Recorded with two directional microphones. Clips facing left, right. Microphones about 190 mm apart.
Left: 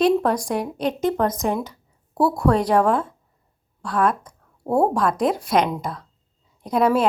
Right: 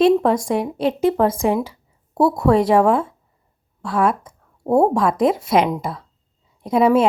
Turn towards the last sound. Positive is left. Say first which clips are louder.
# right 4 dB
turn(degrees=0)  # may be behind; listen again after turning